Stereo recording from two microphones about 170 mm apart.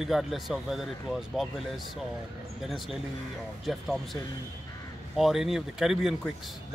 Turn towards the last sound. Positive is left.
turn(degrees=0)  # may be behind; listen again after turning